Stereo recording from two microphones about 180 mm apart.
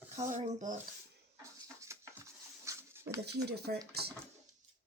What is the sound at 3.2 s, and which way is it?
Speech, 65° right (ahead or behind).